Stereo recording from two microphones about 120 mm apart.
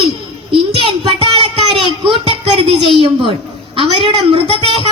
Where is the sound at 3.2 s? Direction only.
50° right (ahead or behind).